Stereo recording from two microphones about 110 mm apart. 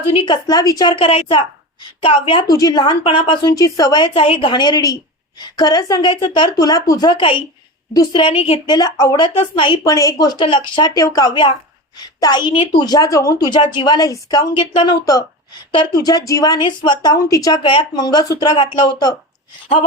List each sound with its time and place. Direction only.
0.1 s a woman's voice: 50° left (ahead or behind)
0.4 s speech: 35° left (ahead or behind)
1.0 s a woman's voice: 55° left (ahead or behind)
2.5 s a woman's voice: 35° left (ahead or behind); by 3.5 s 50° left (ahead or behind)
3.5 s speech: 35° left (ahead or behind)
4.1 s a woman's voice: 55° left (ahead or behind)
8.3 s a woman's voice: 65° left (ahead or behind)
8.6 s a woman's voice: 35° left (ahead or behind)
9.8 s speech: 30° left (ahead or behind)
10.4 s speech: 50° left (ahead or behind); by 13.5 s 30° left (ahead or behind)
13.5 s speech: 45° left (ahead or behind)
14.5 s a woman's voice: 50° left (ahead or behind); by 17.6 s 35° left (ahead or behind)
17.6 s speech: 50° left (ahead or behind)
18.5 s a woman's voice: 50° left (ahead or behind)